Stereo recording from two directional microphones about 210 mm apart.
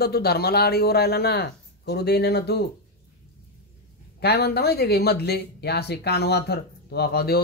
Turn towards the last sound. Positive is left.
turn(degrees=50)  # may be behind; listen again after turning